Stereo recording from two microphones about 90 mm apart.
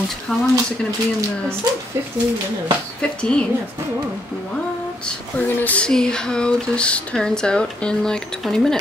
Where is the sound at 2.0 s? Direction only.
30° right (ahead or behind).